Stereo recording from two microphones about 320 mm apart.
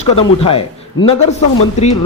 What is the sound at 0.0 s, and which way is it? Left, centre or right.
Speech, centre.